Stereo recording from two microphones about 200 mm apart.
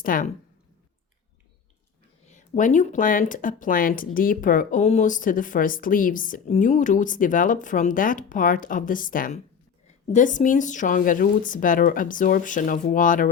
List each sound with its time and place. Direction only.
0.0 s speech: 45° left (ahead or behind)
2.2 s speech: 40° left (ahead or behind)